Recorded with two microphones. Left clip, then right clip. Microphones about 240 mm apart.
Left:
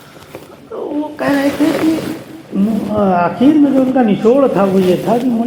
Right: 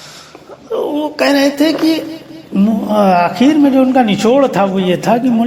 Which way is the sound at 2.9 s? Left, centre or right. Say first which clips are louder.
Right 3 dB; right.